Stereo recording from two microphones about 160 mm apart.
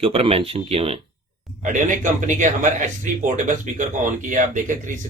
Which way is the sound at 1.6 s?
50° right (ahead or behind).